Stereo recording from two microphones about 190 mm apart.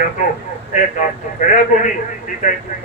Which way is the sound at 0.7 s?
40° left (ahead or behind).